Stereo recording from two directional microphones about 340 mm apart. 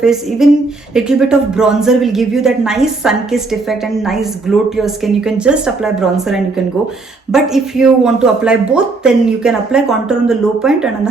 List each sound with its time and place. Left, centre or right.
0.0 s speech: centre